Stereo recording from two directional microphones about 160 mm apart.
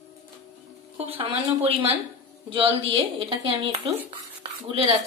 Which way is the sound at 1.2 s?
35° right (ahead or behind).